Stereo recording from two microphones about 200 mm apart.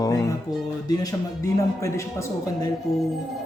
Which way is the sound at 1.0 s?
15° left (ahead or behind).